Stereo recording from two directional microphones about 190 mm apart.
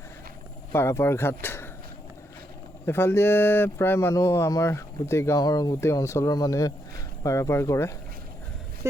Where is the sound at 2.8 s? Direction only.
10° left (ahead or behind).